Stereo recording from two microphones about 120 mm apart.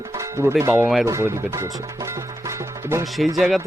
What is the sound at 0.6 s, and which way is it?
Speech, 20° right (ahead or behind).